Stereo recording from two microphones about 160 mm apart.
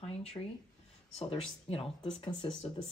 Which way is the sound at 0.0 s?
40° left (ahead or behind).